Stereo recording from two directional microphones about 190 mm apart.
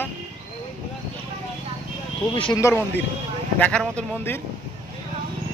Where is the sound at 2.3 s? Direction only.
25° left (ahead or behind).